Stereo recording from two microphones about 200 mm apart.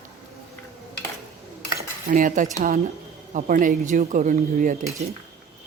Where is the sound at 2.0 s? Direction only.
40° right (ahead or behind).